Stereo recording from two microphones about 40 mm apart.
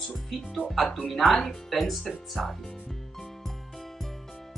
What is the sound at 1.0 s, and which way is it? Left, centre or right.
Speech, centre.